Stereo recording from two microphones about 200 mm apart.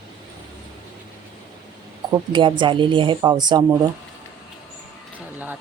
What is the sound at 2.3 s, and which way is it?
A woman's voice, 25° right (ahead or behind).